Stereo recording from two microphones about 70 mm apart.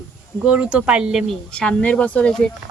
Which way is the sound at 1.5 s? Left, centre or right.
Centre.